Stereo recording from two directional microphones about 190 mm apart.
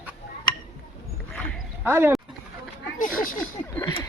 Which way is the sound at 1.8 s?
10° right (ahead or behind).